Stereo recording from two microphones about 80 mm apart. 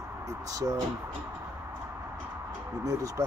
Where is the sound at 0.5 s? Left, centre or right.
Right.